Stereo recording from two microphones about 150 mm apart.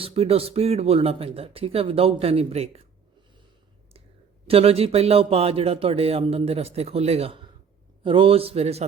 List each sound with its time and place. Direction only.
0.0 s a man's voice: 40° right (ahead or behind)
4.4 s a man's voice: 40° right (ahead or behind)